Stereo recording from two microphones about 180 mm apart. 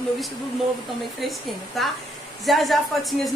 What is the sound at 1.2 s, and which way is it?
Speech, centre (ahead or behind).